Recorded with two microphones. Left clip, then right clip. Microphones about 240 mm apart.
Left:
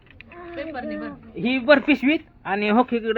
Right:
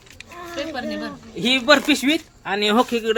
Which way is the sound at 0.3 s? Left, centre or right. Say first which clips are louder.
Right 3 dB; centre.